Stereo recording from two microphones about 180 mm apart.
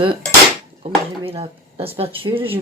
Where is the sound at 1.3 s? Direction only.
30° right (ahead or behind).